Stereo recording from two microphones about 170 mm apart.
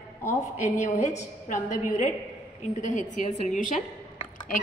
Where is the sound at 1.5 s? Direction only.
45° left (ahead or behind).